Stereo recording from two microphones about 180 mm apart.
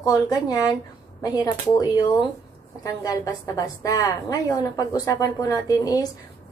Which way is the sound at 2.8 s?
20° left (ahead or behind).